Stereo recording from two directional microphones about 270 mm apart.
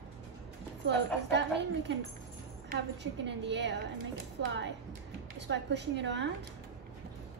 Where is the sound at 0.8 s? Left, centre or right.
Right.